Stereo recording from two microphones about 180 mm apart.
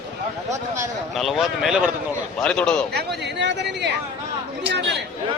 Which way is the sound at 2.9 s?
70° right (ahead or behind).